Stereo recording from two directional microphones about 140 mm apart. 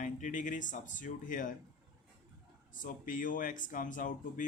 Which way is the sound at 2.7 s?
70° left (ahead or behind).